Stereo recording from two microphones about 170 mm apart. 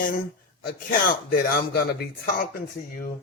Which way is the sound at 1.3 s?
60° left (ahead or behind).